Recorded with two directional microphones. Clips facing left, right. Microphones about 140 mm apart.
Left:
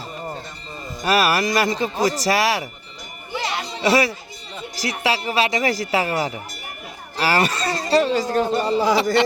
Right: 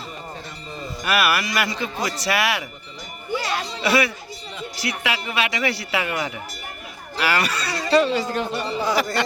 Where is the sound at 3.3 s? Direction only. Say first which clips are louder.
Right 1 dB; 25° left (ahead or behind).